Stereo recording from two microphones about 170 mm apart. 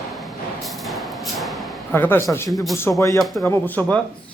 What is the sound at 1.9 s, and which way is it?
Speech, 10° left (ahead or behind).